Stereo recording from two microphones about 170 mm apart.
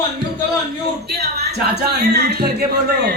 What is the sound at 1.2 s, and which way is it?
A man's voice, 75° right (ahead or behind).